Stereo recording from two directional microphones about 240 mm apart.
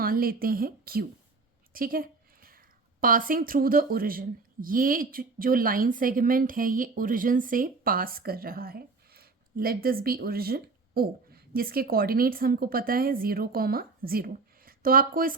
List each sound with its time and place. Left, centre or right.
0.0 s a woman's voice: right